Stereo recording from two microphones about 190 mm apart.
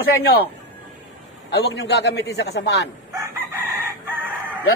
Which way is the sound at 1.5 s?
60° left (ahead or behind).